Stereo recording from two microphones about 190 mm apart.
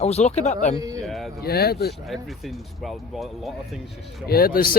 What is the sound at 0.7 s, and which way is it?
Speech, 20° right (ahead or behind).